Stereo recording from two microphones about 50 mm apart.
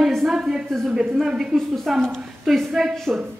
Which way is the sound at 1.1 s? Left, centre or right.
Centre.